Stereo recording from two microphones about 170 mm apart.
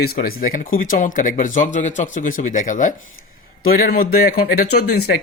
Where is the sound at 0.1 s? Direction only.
60° left (ahead or behind).